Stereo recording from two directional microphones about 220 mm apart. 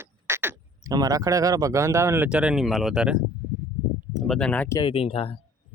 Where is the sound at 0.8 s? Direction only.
15° right (ahead or behind); by 4.8 s 5° left (ahead or behind).